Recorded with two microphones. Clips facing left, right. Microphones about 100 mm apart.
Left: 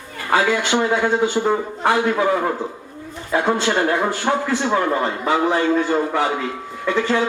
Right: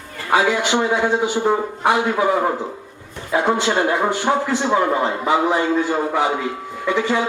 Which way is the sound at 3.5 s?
15° right (ahead or behind).